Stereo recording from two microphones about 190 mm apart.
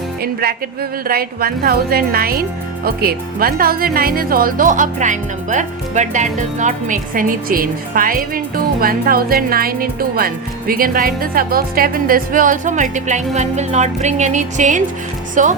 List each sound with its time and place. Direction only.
0.2 s speech: 50° right (ahead or behind)